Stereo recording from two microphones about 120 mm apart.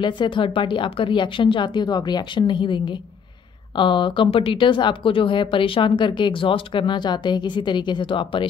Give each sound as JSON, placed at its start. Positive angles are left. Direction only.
{"t": 0.0, "sound": "a woman's voice", "side_deg": 40}